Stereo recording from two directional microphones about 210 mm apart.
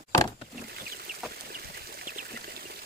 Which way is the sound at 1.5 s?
45° right (ahead or behind).